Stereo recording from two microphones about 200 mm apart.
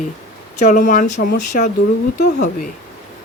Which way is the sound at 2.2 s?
50° left (ahead or behind).